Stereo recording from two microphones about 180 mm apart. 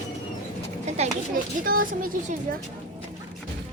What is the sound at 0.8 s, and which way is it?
Children playing, 40° right (ahead or behind).